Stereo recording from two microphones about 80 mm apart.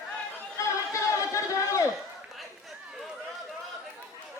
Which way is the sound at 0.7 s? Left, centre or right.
Left.